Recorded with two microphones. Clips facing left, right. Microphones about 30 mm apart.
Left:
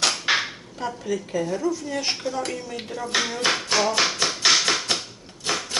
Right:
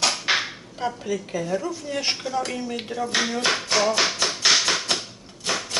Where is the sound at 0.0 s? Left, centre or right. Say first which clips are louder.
Even; centre.